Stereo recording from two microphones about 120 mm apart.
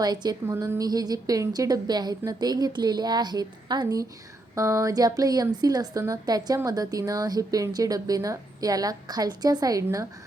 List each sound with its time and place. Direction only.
0.0 s a woman's voice: 35° right (ahead or behind)
0.4 s a woman's voice: 20° right (ahead or behind)
4.5 s a sound: 25° right (ahead or behind)
5.5 s a woman's voice: 35° right (ahead or behind)